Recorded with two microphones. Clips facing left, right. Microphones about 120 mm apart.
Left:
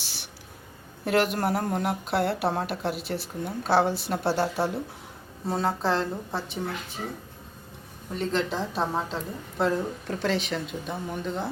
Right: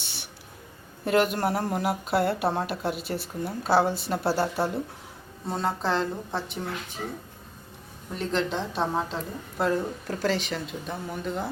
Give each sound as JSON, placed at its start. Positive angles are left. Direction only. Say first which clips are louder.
{"t": 0.0, "sound": "a sound", "louder": "even", "side_deg": 0}
{"t": 1.0, "sound": "a woman's voice", "louder": "right 1 dB", "side_deg": 0}
{"t": 8.2, "sound": "a woman's voice", "louder": "even", "side_deg": 0}